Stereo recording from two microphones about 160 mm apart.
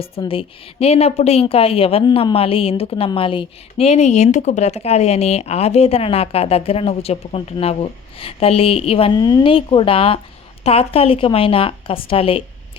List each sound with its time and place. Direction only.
0.0 s speech: 35° left (ahead or behind)